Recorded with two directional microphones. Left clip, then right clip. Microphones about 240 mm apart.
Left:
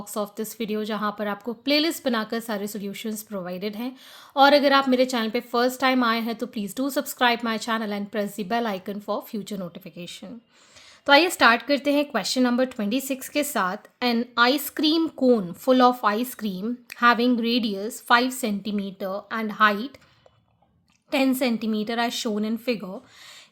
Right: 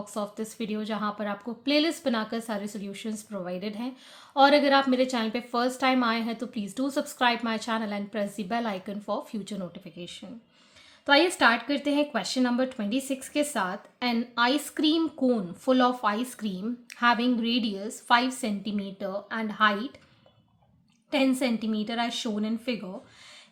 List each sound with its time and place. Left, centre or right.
0.0 s speech: left
21.1 s speech: left